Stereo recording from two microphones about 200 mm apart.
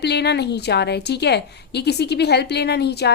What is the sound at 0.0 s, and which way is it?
A woman's voice, 55° left (ahead or behind).